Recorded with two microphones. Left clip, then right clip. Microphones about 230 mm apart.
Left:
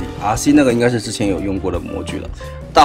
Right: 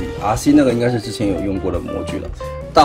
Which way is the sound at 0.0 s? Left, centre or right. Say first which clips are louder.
Even; centre.